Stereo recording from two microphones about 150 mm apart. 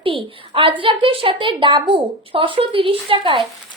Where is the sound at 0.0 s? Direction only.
35° right (ahead or behind).